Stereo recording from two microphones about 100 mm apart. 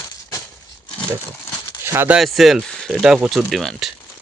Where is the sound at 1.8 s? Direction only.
25° right (ahead or behind).